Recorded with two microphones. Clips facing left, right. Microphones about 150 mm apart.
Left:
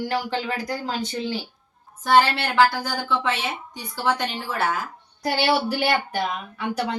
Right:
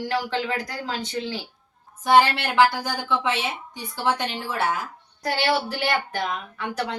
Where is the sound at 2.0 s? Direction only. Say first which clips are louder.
Even; 15° right (ahead or behind).